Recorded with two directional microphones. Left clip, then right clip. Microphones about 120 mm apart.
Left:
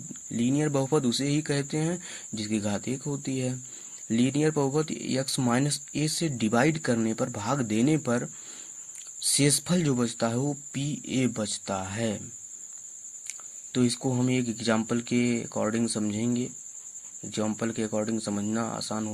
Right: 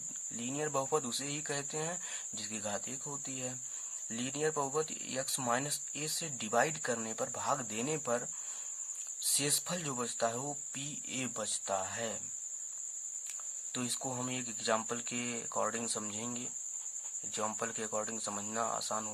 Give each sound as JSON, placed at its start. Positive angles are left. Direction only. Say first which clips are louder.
{"t": 0.3, "sound": "speech", "louder": "left 9 dB", "side_deg": 15}
{"t": 9.3, "sound": "speech", "louder": "left 9 dB", "side_deg": 15}
{"t": 13.7, "sound": "speech", "louder": "left 11 dB", "side_deg": 15}